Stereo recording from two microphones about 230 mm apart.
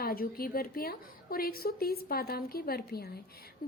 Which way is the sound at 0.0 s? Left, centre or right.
Left.